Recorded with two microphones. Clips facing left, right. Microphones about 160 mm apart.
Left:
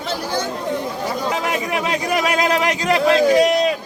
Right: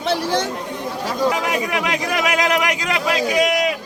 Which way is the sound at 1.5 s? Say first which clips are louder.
Even; 30° left (ahead or behind).